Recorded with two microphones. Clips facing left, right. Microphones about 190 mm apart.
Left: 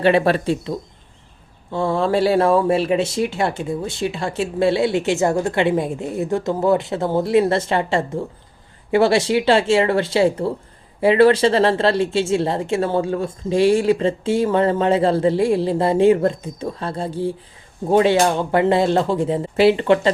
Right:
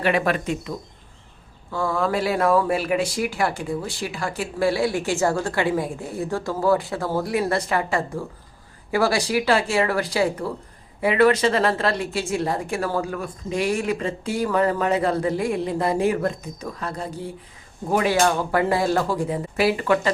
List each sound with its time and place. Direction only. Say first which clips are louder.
0.0 s speech: left 6 dB; 30° left (ahead or behind)